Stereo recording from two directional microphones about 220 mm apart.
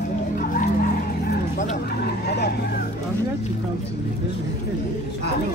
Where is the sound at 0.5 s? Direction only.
40° left (ahead or behind).